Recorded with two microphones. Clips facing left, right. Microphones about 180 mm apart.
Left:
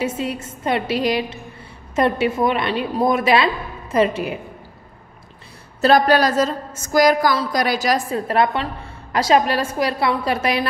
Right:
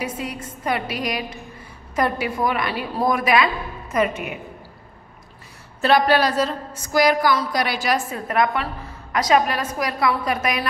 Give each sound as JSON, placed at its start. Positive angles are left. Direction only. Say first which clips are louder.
{"t": 0.0, "sound": "a woman's voice", "louder": "left 5 dB", "side_deg": 25}
{"t": 5.8, "sound": "a woman's voice", "louder": "left 3 dB", "side_deg": 40}